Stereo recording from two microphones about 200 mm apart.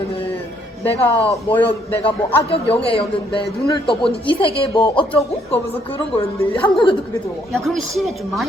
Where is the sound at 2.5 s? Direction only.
30° left (ahead or behind).